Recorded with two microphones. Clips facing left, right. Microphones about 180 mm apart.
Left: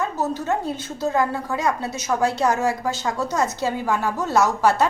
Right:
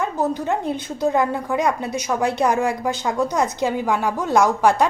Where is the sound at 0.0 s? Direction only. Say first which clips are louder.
Right 2 dB; 15° right (ahead or behind).